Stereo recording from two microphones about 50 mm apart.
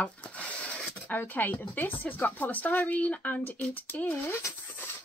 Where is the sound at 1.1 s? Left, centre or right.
Left.